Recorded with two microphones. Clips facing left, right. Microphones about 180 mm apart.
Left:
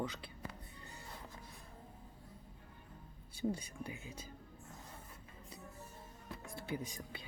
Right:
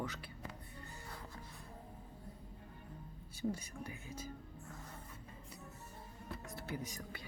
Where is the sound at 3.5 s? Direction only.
15° left (ahead or behind).